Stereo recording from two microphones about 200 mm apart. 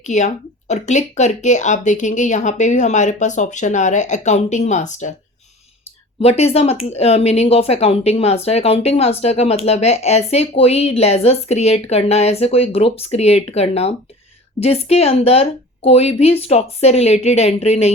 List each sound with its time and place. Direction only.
0.0 s speech: 35° left (ahead or behind)
6.2 s speech: 30° left (ahead or behind)